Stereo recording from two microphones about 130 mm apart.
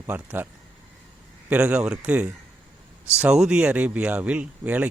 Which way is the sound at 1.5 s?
10° right (ahead or behind).